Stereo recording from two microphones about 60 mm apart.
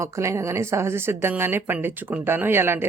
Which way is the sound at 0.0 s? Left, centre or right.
Right.